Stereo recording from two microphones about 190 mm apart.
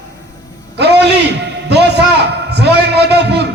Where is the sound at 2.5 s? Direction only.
60° right (ahead or behind).